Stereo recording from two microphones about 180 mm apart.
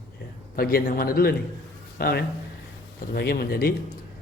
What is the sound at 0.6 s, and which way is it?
A man's voice, 55° left (ahead or behind).